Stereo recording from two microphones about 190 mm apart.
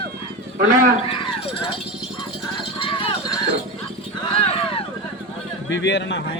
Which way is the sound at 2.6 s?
25° left (ahead or behind).